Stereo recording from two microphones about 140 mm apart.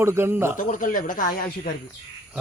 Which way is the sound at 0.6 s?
65° left (ahead or behind).